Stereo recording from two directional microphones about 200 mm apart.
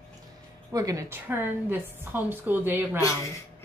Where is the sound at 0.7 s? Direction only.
15° right (ahead or behind).